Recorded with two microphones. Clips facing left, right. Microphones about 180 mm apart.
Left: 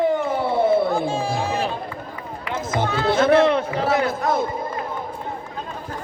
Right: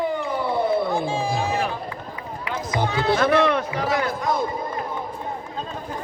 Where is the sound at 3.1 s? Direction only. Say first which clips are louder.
Left 3 dB; 25° left (ahead or behind).